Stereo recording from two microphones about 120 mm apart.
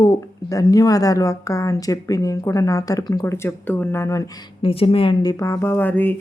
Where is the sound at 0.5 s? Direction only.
30° left (ahead or behind).